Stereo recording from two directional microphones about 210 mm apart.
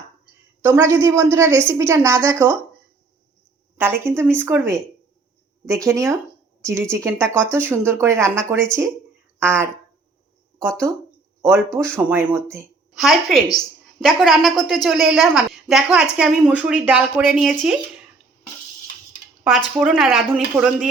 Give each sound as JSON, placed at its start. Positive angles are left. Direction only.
{"t": 0.6, "sound": "a woman's voice", "side_deg": -15}
{"t": 3.8, "sound": "a woman's voice", "side_deg": -10}
{"t": 11.4, "sound": "a woman's voice", "side_deg": -10}
{"t": 13.0, "sound": "a woman's voice", "side_deg": 0}
{"t": 19.5, "sound": "a woman's voice", "side_deg": 0}